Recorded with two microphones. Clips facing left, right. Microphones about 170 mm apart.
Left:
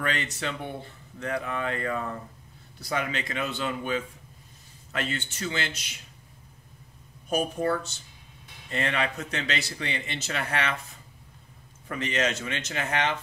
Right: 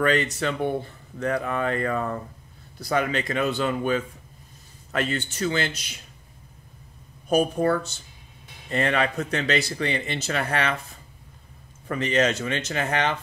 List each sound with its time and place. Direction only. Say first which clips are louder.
0.0 s speech: right 8 dB; 45° right (ahead or behind)
7.5 s speech: right 4 dB; 50° right (ahead or behind)
11.9 s speech: right 6 dB; 35° right (ahead or behind)